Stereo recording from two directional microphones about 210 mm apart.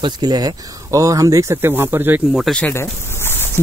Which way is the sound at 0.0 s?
20° right (ahead or behind).